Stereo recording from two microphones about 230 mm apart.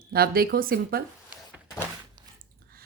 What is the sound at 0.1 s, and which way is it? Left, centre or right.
Speech, right.